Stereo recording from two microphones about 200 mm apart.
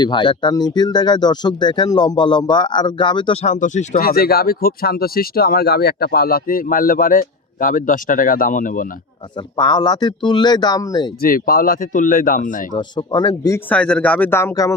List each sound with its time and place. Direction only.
0.0 s speech: 25° left (ahead or behind)
3.4 s speech: 35° left (ahead or behind)
9.6 s speech: 20° left (ahead or behind)
11.2 s speech: 45° left (ahead or behind)
12.7 s speech: 20° left (ahead or behind)
13.7 s speech: 5° left (ahead or behind)